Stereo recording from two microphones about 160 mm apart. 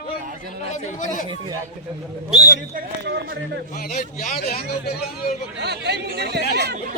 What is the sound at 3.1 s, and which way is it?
Speech, 90° right.